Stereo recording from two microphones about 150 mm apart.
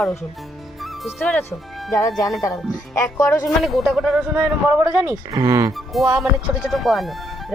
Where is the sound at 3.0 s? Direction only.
20° left (ahead or behind).